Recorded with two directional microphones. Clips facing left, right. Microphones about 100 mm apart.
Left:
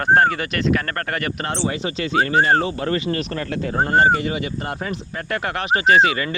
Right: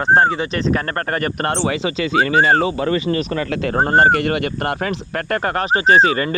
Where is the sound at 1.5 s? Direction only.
75° right (ahead or behind); by 1.9 s 90° right.